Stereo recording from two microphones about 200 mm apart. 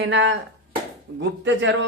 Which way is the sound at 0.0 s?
65° right (ahead or behind).